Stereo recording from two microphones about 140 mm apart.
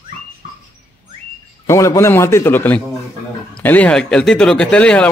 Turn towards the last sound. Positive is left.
turn(degrees=10)  # may be behind; listen again after turning